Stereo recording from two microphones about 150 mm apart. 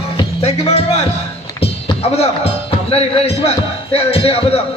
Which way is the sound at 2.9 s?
40° left (ahead or behind).